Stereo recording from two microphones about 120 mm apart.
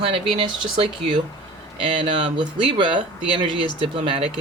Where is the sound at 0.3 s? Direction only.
45° right (ahead or behind).